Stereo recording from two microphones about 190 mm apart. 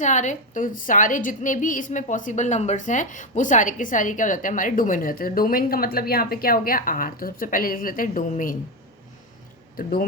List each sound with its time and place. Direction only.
0.0 s a woman's voice: 40° left (ahead or behind)
9.7 s a woman's voice: 45° left (ahead or behind)